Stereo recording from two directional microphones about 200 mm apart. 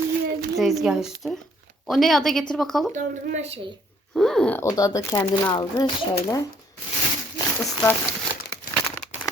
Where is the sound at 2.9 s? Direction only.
35° right (ahead or behind).